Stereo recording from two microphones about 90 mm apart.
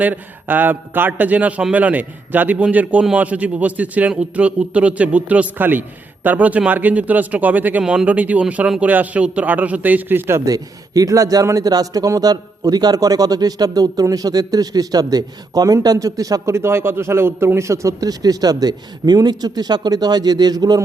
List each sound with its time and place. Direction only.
0.0 s a man's voice: 20° right (ahead or behind)
10.4 s a man's voice: 40° right (ahead or behind)